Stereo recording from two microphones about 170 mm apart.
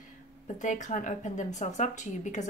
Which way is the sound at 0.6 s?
45° left (ahead or behind).